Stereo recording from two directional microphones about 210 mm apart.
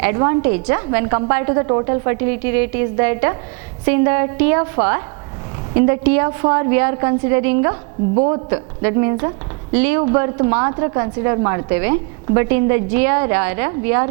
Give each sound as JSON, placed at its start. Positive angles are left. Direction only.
{"t": 0.0, "sound": "a woman's voice", "side_deg": -15}